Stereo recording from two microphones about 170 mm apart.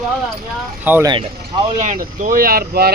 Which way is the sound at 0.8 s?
10° right (ahead or behind).